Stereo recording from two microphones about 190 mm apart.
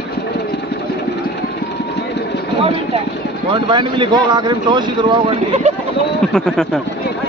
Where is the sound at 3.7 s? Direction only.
25° right (ahead or behind).